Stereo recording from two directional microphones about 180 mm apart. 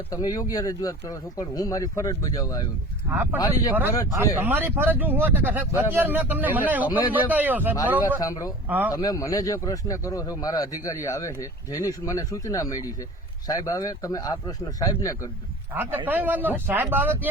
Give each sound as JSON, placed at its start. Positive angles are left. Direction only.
{"t": 0.1, "sound": "speech", "side_deg": 20}
{"t": 4.1, "sound": "speech", "side_deg": -10}
{"t": 8.2, "sound": "speech", "side_deg": 20}
{"t": 8.7, "sound": "speech", "side_deg": -10}
{"t": 9.0, "sound": "speech", "side_deg": 20}
{"t": 15.7, "sound": "speech", "side_deg": -10}